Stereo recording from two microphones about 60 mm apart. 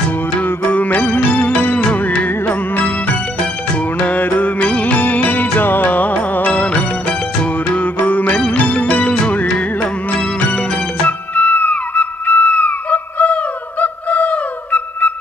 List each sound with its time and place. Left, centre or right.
0.4 s music: left